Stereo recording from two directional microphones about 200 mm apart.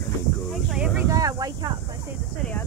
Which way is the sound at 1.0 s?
15° right (ahead or behind).